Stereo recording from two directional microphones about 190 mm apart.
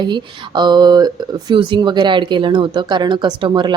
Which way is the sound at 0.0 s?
25° right (ahead or behind).